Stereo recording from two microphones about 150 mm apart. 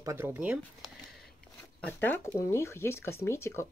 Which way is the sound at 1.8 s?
10° left (ahead or behind).